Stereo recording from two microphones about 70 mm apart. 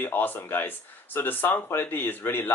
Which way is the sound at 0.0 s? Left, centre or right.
Left.